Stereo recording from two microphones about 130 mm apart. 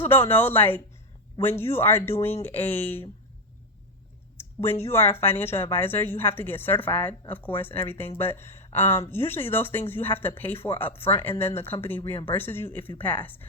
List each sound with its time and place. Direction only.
0.0 s speech: 15° left (ahead or behind)
2.1 s speech: 50° left (ahead or behind)
2.4 s speech: 15° left (ahead or behind)
4.4 s speech: 20° left (ahead or behind)